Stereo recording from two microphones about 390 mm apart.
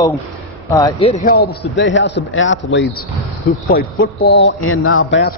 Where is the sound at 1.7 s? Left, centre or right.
Left.